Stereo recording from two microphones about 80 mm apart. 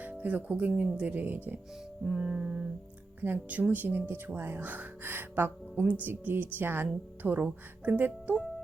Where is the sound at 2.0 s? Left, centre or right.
Centre.